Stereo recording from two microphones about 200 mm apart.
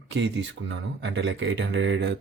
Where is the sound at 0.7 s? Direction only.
65° right (ahead or behind).